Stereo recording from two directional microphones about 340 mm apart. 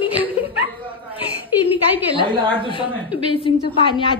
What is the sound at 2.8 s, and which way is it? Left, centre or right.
Speech, centre.